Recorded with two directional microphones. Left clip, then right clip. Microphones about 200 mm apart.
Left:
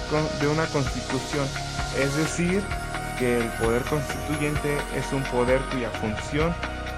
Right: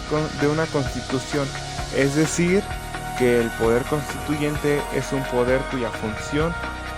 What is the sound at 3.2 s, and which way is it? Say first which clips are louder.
Speech: right 6 dB; 45° right (ahead or behind).